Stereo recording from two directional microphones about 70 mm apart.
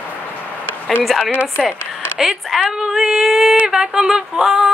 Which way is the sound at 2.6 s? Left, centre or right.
Centre.